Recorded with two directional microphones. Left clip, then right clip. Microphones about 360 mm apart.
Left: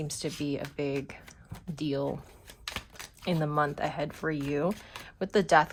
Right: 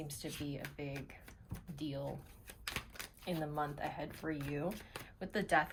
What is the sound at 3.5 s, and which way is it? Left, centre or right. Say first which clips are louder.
Speech: left 11 dB; centre.